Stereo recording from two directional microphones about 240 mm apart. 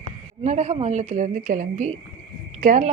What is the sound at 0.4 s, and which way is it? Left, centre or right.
A woman's voice, right.